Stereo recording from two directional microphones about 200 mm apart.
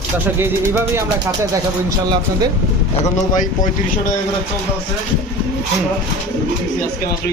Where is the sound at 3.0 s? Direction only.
40° left (ahead or behind).